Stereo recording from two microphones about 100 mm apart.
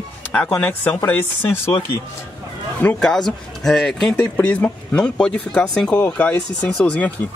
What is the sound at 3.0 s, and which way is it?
Speech, 5° left (ahead or behind).